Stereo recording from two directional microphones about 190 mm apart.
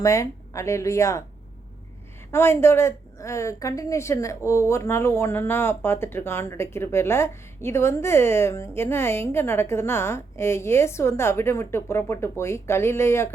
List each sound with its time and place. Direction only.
0.0 s a woman's voice: 15° left (ahead or behind)
2.3 s a woman's voice: 15° left (ahead or behind)